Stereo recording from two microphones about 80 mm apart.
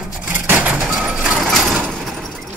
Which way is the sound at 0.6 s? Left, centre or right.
Centre.